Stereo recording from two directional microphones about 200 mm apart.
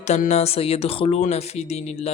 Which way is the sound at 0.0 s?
35° left (ahead or behind).